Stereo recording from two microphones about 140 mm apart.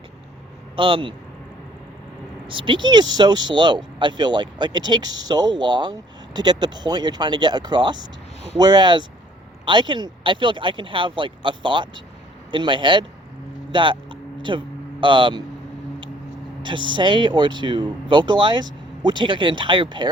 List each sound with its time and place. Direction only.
0.8 s speech: 35° right (ahead or behind)
2.5 s speech: 35° right (ahead or behind)
13.7 s a sound: 35° right (ahead or behind)
15.0 s speech: 35° right (ahead or behind)
16.6 s speech: 35° right (ahead or behind)